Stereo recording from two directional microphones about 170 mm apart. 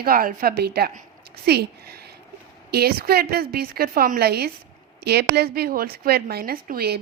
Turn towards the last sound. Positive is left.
turn(degrees=-60)  # may be behind; listen again after turning